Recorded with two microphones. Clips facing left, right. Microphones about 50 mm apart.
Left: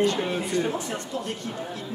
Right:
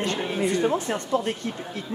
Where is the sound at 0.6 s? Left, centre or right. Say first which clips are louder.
Right 4 dB; right.